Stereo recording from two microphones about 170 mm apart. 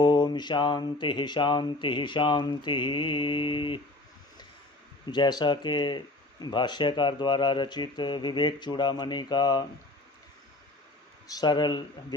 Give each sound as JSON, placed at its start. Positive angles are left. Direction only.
{"t": 0.0, "sound": "speech", "side_deg": 25}
{"t": 5.1, "sound": "speech", "side_deg": 25}
{"t": 11.3, "sound": "speech", "side_deg": 25}